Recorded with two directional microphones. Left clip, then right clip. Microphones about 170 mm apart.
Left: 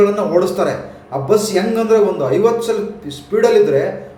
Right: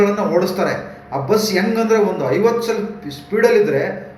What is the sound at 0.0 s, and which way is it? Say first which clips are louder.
A man's voice: left 2 dB; 15° left (ahead or behind).